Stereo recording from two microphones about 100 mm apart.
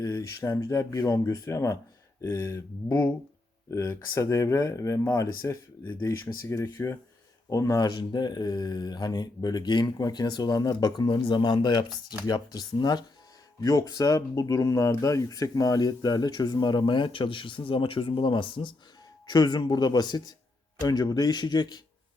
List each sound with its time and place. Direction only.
0.0 s speech: 35° left (ahead or behind); by 18.7 s 55° left (ahead or behind)
19.3 s speech: 45° left (ahead or behind)